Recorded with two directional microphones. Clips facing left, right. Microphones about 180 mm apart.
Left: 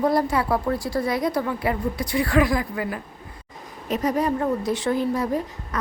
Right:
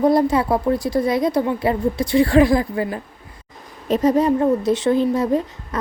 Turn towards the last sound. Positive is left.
turn(degrees=-25)  # may be behind; listen again after turning